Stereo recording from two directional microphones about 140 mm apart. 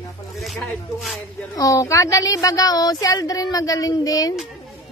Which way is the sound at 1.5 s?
25° left (ahead or behind).